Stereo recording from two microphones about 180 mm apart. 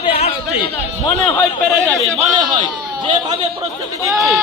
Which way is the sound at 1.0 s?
15° left (ahead or behind).